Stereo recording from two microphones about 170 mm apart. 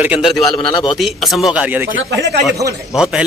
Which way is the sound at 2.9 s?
5° right (ahead or behind).